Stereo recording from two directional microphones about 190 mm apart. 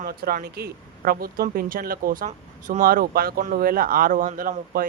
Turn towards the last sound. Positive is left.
turn(degrees=-45)  # may be behind; listen again after turning